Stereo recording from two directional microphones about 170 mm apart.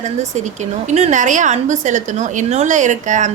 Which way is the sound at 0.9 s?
40° right (ahead or behind).